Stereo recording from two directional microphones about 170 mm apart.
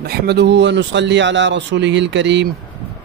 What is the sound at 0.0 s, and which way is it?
Speech, 70° right (ahead or behind).